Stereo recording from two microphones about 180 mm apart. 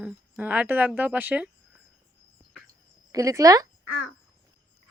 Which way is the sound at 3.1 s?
20° right (ahead or behind).